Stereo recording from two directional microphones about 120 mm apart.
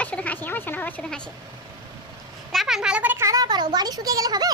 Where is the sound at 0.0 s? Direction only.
10° left (ahead or behind).